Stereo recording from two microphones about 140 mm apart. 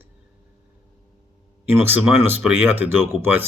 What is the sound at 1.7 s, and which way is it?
Speech, 15° right (ahead or behind).